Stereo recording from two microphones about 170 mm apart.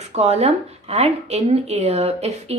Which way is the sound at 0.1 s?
40° right (ahead or behind).